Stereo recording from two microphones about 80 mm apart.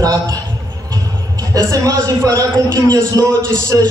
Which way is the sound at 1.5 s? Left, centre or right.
Right.